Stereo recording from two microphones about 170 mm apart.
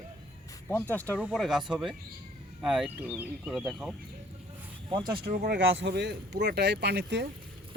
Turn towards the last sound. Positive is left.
turn(degrees=-75)  # may be behind; listen again after turning